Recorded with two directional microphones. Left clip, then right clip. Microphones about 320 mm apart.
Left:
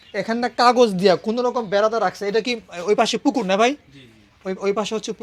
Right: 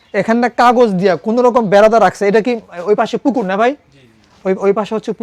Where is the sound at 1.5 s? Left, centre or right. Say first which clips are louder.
Right 11 dB; right.